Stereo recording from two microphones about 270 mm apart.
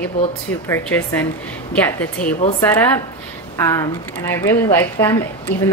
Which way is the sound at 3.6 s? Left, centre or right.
Centre.